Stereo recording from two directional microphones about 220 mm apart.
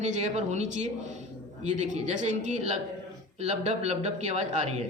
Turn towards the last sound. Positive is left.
turn(degrees=-30)  # may be behind; listen again after turning